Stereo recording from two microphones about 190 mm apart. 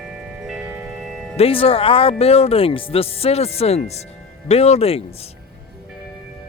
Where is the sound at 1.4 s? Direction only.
30° left (ahead or behind).